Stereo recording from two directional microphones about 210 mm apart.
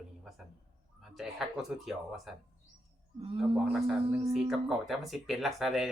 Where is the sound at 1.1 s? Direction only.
Centre (ahead or behind).